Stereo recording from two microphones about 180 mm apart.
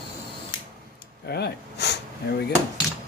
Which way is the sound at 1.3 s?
65° left (ahead or behind).